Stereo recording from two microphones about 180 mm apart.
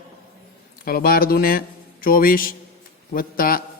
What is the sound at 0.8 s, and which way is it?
A man's voice, 55° left (ahead or behind).